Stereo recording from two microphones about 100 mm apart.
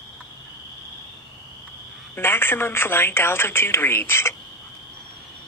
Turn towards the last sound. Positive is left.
turn(degrees=25)  # may be behind; listen again after turning